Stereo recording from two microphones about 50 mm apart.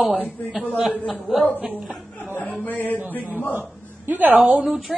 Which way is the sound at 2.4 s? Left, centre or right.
Left.